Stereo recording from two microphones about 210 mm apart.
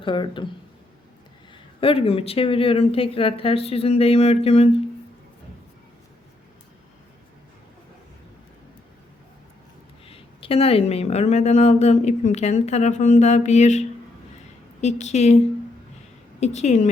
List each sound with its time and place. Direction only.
0.0 s speech: 25° left (ahead or behind)
1.8 s speech: 25° left (ahead or behind)
10.1 s speech: 25° left (ahead or behind)
16.4 s speech: 30° left (ahead or behind)